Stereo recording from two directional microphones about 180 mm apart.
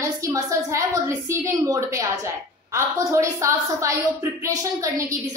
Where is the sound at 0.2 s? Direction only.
20° right (ahead or behind).